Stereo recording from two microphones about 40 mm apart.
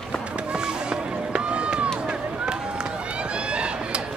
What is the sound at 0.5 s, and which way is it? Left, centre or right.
Run, right.